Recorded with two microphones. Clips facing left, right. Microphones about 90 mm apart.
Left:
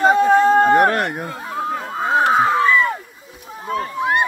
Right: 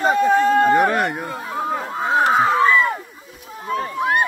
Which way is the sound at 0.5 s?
35° left (ahead or behind).